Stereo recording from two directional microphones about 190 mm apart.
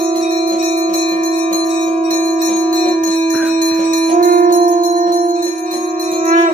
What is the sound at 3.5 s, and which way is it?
Bell, 45° right (ahead or behind).